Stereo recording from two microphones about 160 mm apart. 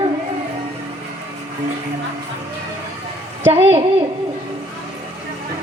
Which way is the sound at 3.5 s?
40° right (ahead or behind).